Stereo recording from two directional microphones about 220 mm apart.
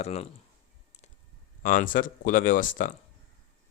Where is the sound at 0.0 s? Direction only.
30° left (ahead or behind).